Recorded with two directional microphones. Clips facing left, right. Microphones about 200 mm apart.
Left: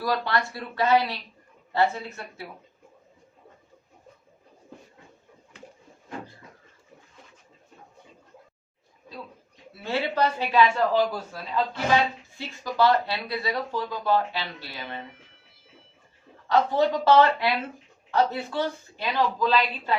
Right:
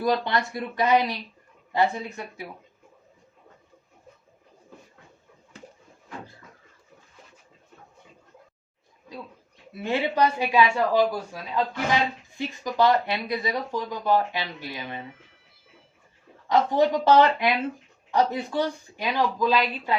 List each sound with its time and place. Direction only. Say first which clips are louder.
0.0 s speech: right 2 dB; 20° right (ahead or behind)
9.7 s speech: right 2 dB; 20° right (ahead or behind)
12.6 s speech: even; 15° right (ahead or behind)
16.5 s speech: right 1 dB; 15° right (ahead or behind)